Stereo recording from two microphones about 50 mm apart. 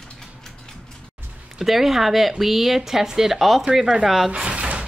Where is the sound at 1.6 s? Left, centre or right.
Centre.